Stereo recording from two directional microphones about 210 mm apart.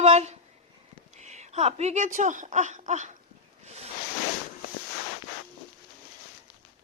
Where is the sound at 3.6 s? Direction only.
30° right (ahead or behind).